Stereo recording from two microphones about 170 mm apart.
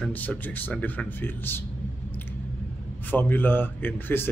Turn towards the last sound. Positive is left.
turn(degrees=10)  # may be behind; listen again after turning